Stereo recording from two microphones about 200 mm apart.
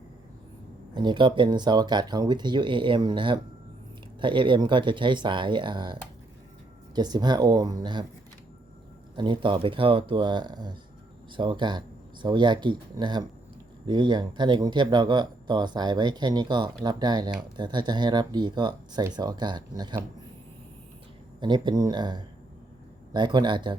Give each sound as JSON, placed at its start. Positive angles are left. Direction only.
{"t": 0.9, "sound": "speech", "side_deg": -20}
{"t": 9.1, "sound": "speech", "side_deg": -25}
{"t": 21.4, "sound": "speech", "side_deg": -20}